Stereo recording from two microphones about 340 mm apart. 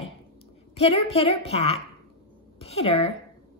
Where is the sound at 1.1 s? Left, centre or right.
Centre.